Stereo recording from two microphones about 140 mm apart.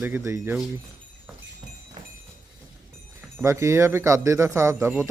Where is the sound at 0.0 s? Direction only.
20° right (ahead or behind).